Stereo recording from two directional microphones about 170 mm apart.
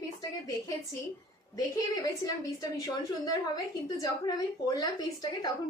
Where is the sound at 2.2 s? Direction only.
20° left (ahead or behind).